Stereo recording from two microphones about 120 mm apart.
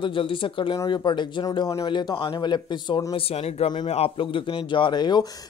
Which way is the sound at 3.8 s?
55° left (ahead or behind).